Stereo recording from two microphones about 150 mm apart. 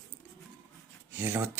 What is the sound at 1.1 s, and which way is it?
Speech, 15° right (ahead or behind).